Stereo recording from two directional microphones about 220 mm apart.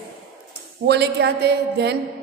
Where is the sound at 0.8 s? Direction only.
50° right (ahead or behind).